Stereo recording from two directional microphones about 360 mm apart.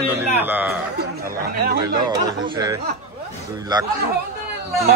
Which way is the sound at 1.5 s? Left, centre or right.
Right.